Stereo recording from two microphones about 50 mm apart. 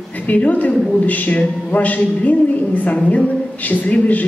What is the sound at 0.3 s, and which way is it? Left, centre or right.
A man's voice, left.